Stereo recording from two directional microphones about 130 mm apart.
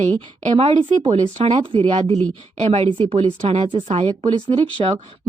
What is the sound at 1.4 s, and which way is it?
A woman's voice, 45° right (ahead or behind).